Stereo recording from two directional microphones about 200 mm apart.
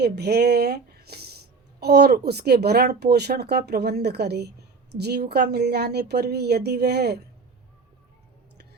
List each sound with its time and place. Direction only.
0.0 s speech: 55° right (ahead or behind)